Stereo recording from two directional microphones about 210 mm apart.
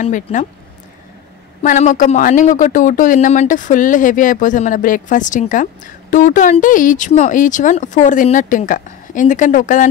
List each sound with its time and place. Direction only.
0.0 s speech: 35° left (ahead or behind)
1.6 s speech: 35° left (ahead or behind)